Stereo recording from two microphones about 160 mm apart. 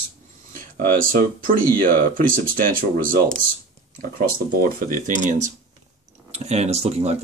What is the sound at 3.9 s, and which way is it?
Speech, 60° right (ahead or behind).